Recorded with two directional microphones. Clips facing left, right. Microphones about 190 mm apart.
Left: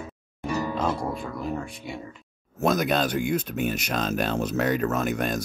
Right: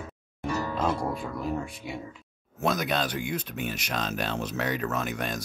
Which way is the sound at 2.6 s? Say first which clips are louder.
Left 4 dB; 45° left (ahead or behind).